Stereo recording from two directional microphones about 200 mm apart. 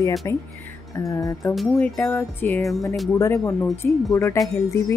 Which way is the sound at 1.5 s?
5° left (ahead or behind).